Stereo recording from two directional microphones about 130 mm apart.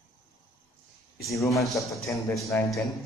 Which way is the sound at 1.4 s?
25° left (ahead or behind).